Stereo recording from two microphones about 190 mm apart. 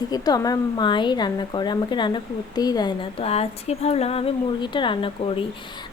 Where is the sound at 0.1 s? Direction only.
20° left (ahead or behind).